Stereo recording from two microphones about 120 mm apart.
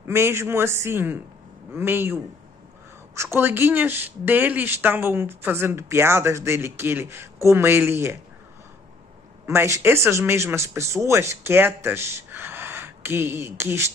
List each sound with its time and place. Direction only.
0.0 s speech: 20° right (ahead or behind)
3.2 s speech: 20° right (ahead or behind)
9.5 s speech: 20° right (ahead or behind)